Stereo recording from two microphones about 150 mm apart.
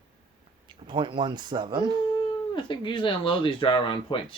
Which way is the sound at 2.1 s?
30° left (ahead or behind).